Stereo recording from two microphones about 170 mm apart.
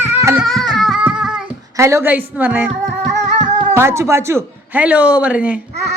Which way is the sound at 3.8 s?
15° right (ahead or behind).